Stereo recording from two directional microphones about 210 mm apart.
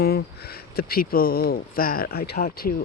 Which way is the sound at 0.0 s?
45° left (ahead or behind).